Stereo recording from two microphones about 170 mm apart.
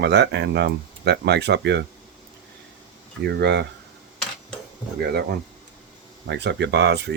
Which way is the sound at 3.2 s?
80° right.